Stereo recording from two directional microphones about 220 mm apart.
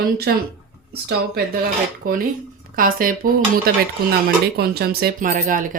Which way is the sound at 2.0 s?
40° right (ahead or behind).